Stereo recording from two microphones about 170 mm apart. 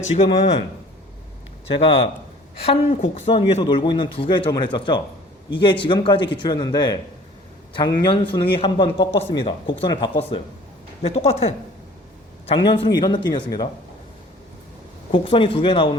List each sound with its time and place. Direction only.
0.1 s speech: 35° left (ahead or behind)
1.6 s speech: 35° left (ahead or behind)
3.2 s a man's voice: 35° left (ahead or behind)
15.1 s speech: 30° left (ahead or behind)